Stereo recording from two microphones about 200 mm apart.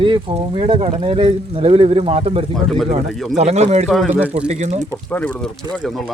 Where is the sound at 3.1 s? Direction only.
Centre (ahead or behind).